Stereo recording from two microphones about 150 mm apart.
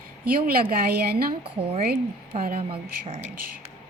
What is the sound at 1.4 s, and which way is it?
Speech, 40° right (ahead or behind).